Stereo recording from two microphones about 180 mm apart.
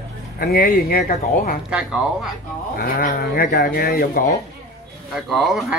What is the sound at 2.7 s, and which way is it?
Speech, 55° left (ahead or behind).